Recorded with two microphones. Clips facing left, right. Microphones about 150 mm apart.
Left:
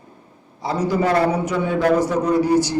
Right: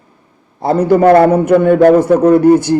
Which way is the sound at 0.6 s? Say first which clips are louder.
Right 11 dB; 55° right (ahead or behind).